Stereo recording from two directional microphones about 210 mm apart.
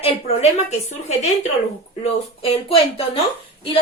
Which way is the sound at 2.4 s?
30° left (ahead or behind).